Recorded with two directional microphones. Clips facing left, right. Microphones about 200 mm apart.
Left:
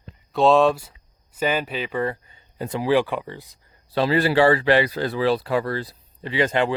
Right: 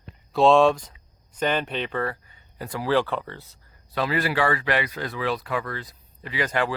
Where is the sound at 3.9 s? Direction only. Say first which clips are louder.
Left 5 dB; 30° left (ahead or behind).